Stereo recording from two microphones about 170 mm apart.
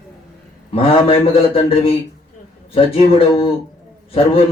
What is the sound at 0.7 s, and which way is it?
A man's voice, 35° left (ahead or behind).